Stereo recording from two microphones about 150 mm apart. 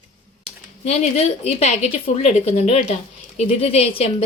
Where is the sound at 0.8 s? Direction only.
45° left (ahead or behind).